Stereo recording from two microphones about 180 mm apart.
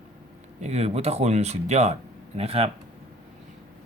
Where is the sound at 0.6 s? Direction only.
35° right (ahead or behind).